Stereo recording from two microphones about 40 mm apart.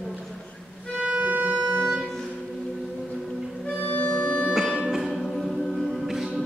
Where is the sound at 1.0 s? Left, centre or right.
Right.